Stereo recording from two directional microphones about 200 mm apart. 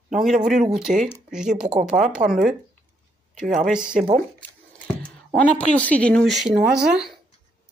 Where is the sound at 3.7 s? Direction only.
5° right (ahead or behind).